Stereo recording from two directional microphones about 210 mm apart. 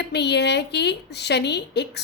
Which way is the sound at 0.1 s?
55° left (ahead or behind).